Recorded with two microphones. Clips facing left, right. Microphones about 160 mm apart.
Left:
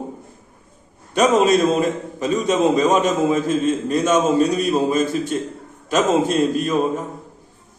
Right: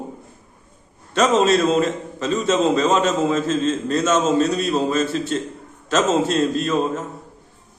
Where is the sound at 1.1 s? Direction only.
10° left (ahead or behind).